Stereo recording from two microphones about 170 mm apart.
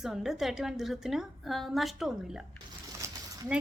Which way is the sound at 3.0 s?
10° right (ahead or behind).